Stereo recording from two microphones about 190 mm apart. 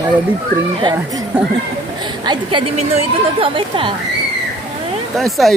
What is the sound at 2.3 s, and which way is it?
Speech, 25° right (ahead or behind).